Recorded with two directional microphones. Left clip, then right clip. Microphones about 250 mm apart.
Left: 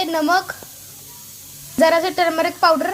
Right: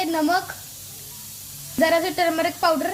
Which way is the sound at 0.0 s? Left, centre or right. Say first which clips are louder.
Left 4 dB; centre.